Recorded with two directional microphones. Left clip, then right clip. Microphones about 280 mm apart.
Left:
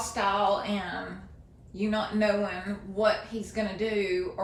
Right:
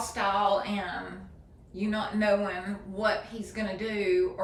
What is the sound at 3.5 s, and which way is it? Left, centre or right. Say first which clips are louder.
Speech: left 3 dB; centre.